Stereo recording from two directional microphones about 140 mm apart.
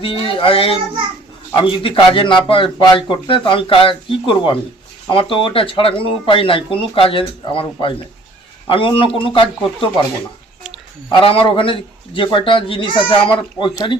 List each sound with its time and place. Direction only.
0.0 s speech: 40° left (ahead or behind)
11.1 s speech: 40° left (ahead or behind)